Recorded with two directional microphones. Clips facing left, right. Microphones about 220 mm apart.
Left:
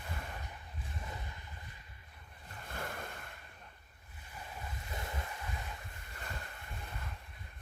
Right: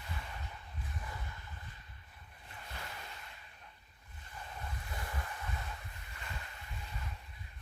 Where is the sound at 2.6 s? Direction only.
50° left (ahead or behind).